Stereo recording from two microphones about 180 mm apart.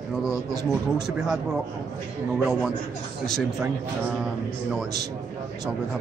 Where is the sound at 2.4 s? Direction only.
5° right (ahead or behind).